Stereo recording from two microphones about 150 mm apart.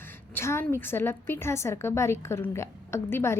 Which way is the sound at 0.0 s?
15° left (ahead or behind).